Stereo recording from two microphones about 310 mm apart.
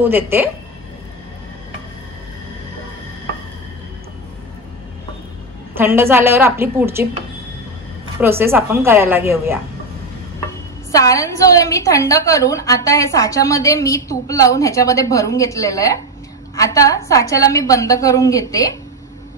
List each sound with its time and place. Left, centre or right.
0.0 s a woman's voice: centre
5.8 s a woman's voice: centre
8.2 s a woman's voice: centre
10.9 s a woman's voice: centre